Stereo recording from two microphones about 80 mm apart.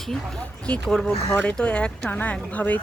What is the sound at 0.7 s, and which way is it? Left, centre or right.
Speech, centre.